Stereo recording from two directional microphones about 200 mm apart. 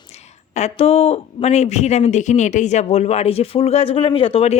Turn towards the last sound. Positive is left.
turn(degrees=30)  # may be behind; listen again after turning